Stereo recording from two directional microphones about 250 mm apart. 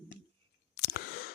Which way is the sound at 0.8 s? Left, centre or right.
Left.